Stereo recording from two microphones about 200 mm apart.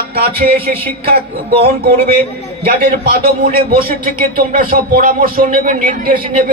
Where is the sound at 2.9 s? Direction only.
45° right (ahead or behind).